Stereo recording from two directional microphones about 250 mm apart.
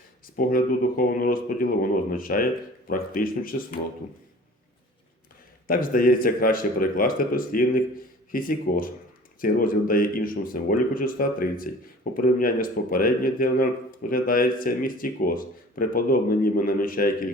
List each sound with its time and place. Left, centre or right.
0.3 s speech: left
5.6 s speech: left